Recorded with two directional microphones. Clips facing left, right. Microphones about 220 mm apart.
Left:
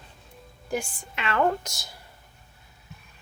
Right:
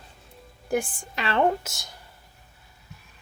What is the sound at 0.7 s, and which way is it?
Speech, 55° right (ahead or behind).